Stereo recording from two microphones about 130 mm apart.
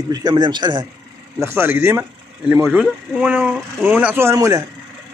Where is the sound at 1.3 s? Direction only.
20° right (ahead or behind).